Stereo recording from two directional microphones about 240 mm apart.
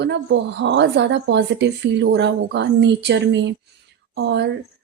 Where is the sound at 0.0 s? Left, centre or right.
Right.